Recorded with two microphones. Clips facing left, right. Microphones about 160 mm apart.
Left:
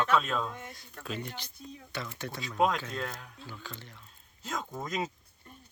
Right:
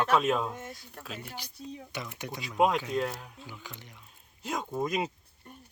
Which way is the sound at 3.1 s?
30° right (ahead or behind).